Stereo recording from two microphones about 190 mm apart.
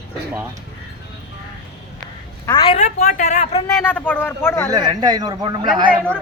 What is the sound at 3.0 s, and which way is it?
Speech, 45° left (ahead or behind).